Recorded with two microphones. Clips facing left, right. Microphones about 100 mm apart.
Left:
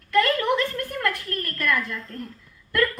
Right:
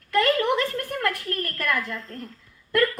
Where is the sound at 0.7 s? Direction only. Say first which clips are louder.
Even; 30° right (ahead or behind).